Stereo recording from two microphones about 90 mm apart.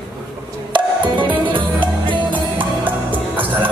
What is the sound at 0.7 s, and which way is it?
Music, 60° right (ahead or behind).